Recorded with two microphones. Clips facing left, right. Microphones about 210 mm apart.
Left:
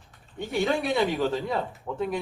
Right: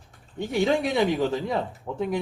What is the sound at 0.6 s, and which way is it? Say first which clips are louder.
Speech: right 2 dB; 15° right (ahead or behind).